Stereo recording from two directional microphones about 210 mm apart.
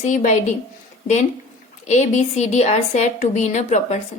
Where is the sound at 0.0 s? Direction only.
35° left (ahead or behind).